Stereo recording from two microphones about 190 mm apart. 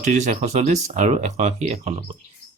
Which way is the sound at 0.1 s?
40° right (ahead or behind).